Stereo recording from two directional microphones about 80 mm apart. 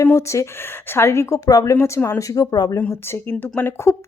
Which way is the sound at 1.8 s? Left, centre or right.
Left.